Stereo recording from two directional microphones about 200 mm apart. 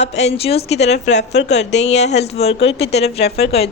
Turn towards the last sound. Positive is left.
turn(degrees=30)  # may be behind; listen again after turning